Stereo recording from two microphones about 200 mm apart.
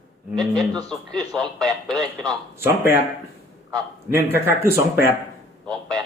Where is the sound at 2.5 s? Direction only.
10° right (ahead or behind).